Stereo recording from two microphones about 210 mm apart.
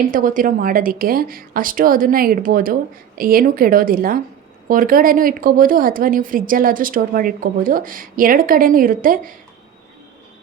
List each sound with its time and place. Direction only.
0.1 s a woman's voice: 40° right (ahead or behind)